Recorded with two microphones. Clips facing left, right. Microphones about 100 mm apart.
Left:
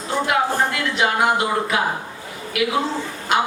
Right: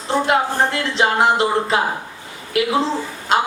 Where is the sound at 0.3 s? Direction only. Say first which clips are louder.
Even; 30° right (ahead or behind).